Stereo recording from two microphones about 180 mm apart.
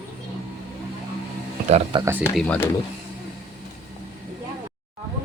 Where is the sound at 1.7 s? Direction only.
30° right (ahead or behind).